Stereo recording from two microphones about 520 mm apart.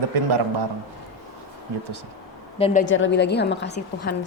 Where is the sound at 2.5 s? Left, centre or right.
Centre.